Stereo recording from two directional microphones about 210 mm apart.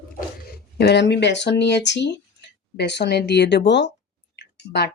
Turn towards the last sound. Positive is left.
turn(degrees=50)  # may be behind; listen again after turning